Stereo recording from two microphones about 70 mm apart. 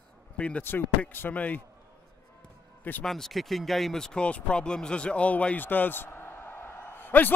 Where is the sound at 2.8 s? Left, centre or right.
Left.